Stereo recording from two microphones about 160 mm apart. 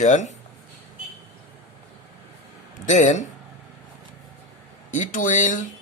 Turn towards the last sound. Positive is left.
turn(degrees=50)  # may be behind; listen again after turning